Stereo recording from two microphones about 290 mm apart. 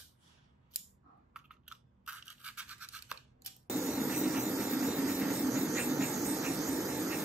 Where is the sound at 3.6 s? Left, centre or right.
Centre.